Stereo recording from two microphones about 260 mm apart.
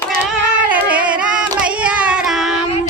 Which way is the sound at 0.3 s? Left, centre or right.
Centre.